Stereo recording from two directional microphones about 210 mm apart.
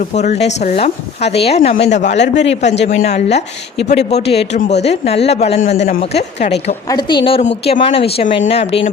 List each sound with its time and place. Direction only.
0.1 s speech: 35° left (ahead or behind)
6.8 s speech: 20° left (ahead or behind)